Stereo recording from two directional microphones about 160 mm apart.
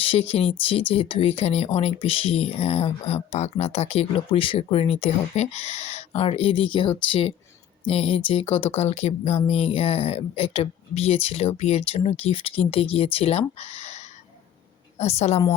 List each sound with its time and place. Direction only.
0.0 s a woman's voice: 40° left (ahead or behind)